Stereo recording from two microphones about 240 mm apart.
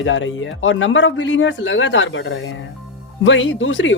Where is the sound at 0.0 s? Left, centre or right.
Left.